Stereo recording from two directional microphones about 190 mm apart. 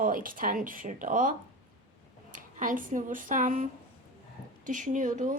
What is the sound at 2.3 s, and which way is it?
Speech, 45° right (ahead or behind).